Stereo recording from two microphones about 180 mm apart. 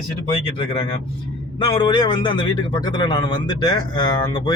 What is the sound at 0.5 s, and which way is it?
A man's voice, 30° left (ahead or behind).